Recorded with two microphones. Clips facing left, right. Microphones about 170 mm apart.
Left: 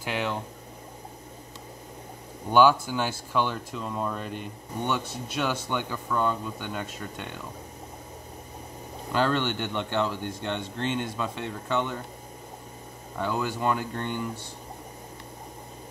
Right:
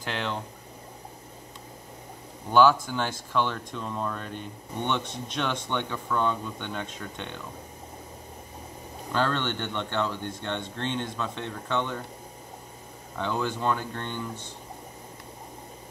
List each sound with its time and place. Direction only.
0.0 s speech: 10° left (ahead or behind)
2.5 s speech: 10° left (ahead or behind)
9.1 s speech: 10° left (ahead or behind)
13.2 s speech: 10° left (ahead or behind)